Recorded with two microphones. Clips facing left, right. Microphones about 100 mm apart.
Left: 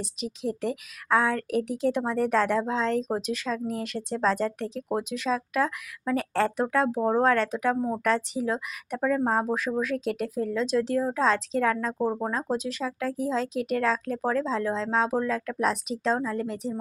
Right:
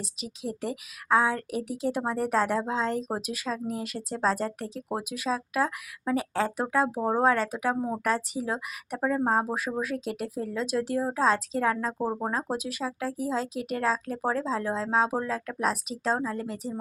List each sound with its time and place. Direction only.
0.0 s speech: centre (ahead or behind)